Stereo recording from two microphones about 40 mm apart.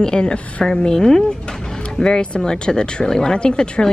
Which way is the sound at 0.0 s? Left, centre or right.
Left.